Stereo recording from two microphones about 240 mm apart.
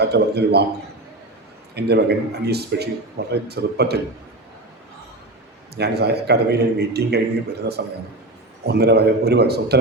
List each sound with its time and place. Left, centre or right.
0.0 s a man's voice: right
1.7 s a man's voice: right
5.7 s a man's voice: right